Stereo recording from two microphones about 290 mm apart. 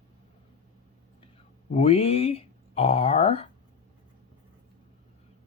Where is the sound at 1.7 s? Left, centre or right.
Centre.